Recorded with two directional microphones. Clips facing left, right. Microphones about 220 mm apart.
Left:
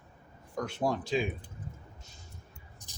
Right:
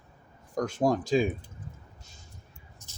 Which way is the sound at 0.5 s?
45° right (ahead or behind).